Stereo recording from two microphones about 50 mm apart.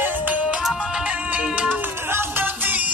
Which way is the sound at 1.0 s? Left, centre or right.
Right.